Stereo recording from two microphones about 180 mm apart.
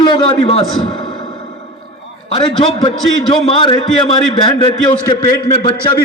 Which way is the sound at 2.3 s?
30° left (ahead or behind).